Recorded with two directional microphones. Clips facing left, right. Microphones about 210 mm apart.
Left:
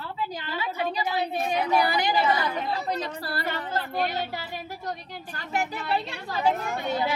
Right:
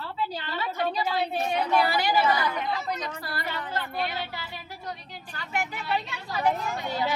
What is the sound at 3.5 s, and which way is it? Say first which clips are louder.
Speech: left 2 dB; 45° left (ahead or behind).